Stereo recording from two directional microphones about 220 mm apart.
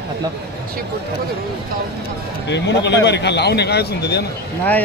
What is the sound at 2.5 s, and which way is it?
A man's voice, 50° left (ahead or behind).